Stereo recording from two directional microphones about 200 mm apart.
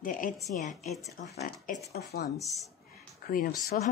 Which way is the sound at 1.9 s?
55° left (ahead or behind).